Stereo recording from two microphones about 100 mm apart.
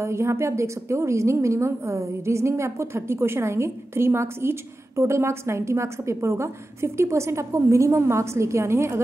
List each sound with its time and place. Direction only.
0.0 s a woman's voice: 30° right (ahead or behind)